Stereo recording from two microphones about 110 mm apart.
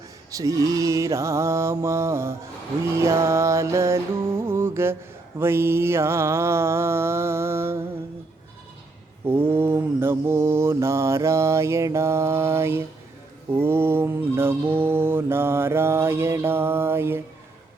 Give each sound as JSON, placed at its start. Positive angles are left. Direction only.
{"t": 0.3, "sound": "mantra", "side_deg": -30}
{"t": 9.2, "sound": "mantra", "side_deg": -20}